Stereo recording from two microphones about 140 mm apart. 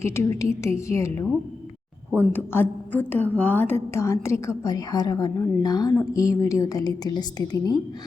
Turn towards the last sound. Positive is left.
turn(degrees=25)  # may be behind; listen again after turning